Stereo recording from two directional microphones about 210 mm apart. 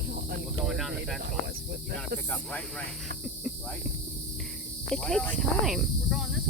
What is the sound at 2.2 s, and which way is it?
Speech, 5° left (ahead or behind).